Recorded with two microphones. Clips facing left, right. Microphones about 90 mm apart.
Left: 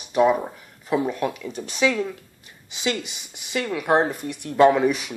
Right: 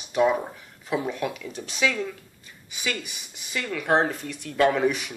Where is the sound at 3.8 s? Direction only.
10° left (ahead or behind).